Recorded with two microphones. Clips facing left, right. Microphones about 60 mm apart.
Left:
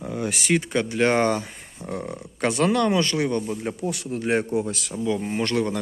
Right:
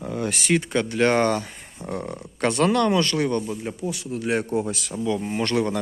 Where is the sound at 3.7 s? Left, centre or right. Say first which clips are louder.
Left 2 dB; left.